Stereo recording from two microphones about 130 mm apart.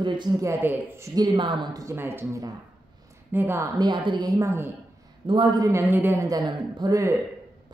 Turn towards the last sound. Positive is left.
turn(degrees=-25)  # may be behind; listen again after turning